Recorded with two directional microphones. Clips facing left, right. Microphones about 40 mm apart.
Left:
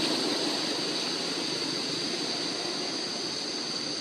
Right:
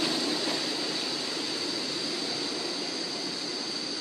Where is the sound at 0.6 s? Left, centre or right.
Centre.